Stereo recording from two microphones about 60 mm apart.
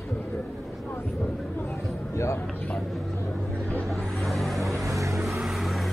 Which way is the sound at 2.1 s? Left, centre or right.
Left.